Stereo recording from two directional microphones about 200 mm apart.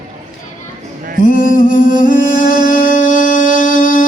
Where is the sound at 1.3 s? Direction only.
75° left (ahead or behind).